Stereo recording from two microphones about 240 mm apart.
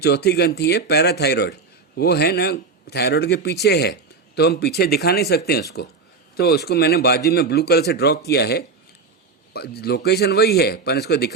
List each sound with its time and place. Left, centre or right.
0.0 s a man's voice: left